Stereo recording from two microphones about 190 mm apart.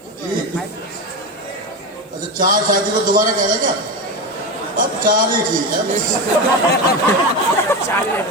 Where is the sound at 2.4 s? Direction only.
45° right (ahead or behind).